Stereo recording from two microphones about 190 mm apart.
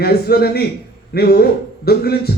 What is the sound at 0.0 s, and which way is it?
A man's voice, 55° left (ahead or behind).